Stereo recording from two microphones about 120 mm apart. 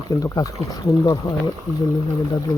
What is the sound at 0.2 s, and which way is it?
Speech, 30° left (ahead or behind).